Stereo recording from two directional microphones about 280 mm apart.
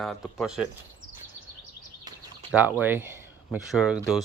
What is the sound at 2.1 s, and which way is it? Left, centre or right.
Bird, centre.